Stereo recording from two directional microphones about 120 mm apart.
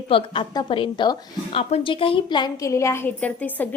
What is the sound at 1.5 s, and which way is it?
Speech, 50° left (ahead or behind).